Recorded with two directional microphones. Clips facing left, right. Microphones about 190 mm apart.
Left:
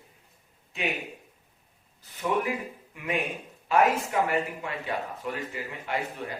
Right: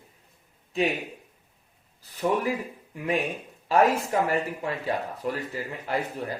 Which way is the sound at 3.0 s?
35° right (ahead or behind).